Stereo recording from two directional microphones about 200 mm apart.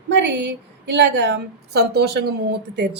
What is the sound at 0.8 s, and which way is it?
A woman's voice, 60° right (ahead or behind).